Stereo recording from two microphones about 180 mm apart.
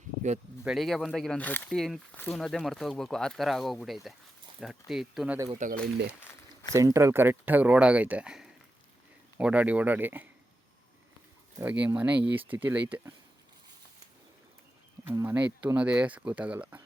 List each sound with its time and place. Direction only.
0.6 s speech: centre (ahead or behind)
5.5 s speech: 45° right (ahead or behind)
6.7 s speech: 15° right (ahead or behind)
11.6 s speech: 10° right (ahead or behind)
15.0 s speech: 15° right (ahead or behind)